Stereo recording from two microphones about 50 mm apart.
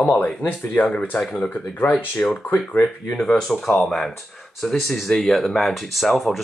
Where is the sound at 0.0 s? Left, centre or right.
Left.